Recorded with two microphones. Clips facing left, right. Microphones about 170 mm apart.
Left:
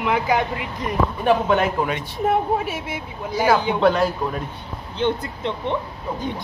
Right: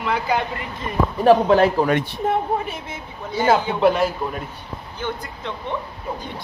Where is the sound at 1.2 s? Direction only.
35° right (ahead or behind).